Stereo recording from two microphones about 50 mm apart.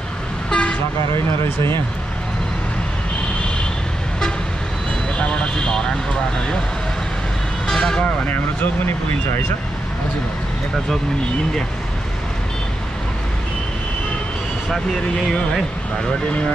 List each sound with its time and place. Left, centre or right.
0.5 s toot: centre
1.4 s speech: left
5.1 s speech: left
7.6 s vehicle: centre